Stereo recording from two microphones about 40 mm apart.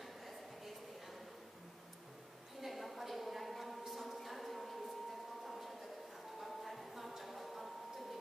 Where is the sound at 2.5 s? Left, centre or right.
Centre.